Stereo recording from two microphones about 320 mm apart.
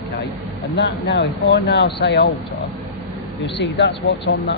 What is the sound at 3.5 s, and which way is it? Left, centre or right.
Speech, left.